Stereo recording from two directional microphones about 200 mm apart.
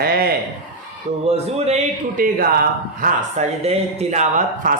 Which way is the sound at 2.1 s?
45° right (ahead or behind).